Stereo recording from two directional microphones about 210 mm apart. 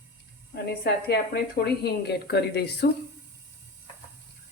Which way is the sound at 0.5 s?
50° left (ahead or behind).